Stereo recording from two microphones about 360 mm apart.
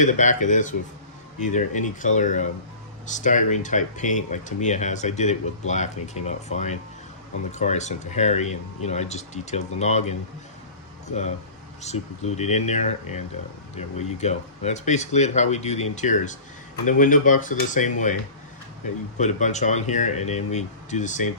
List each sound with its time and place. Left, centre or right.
0.0 s speech: centre
19.2 s speech: centre